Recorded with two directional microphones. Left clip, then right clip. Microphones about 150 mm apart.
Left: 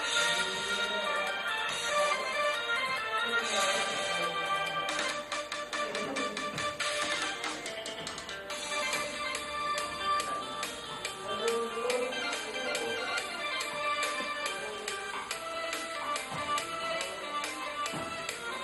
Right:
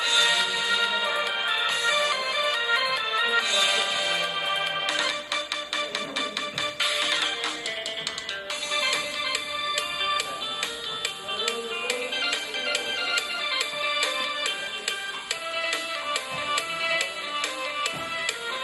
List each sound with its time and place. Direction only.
0.0 s music: 25° right (ahead or behind)
8.7 s music: 25° right (ahead or behind)
11.4 s music: 25° right (ahead or behind)
15.6 s music: 25° right (ahead or behind)